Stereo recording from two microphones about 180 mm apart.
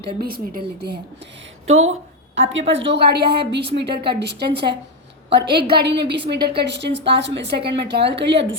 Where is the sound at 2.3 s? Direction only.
90° right; by 8.4 s 70° right (ahead or behind).